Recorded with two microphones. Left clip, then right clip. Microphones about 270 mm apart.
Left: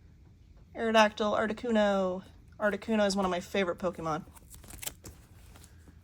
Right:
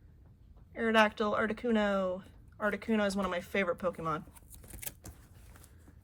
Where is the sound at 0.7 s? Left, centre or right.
Centre.